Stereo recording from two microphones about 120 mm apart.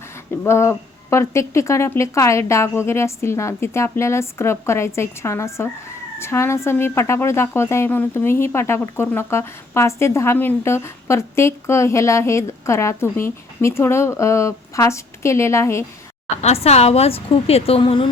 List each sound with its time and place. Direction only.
0.3 s a woman's voice: 20° left (ahead or behind)
16.4 s a woman's voice: 60° left (ahead or behind)